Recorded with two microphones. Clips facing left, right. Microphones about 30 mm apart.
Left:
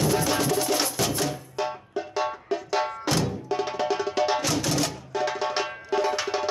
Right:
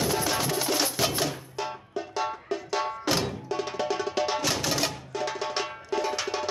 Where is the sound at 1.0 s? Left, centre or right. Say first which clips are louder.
Even; centre.